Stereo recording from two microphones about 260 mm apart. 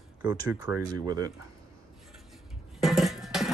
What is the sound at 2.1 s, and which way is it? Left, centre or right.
Music, centre.